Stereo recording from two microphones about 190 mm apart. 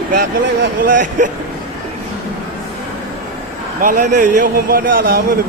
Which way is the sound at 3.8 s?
45° right (ahead or behind).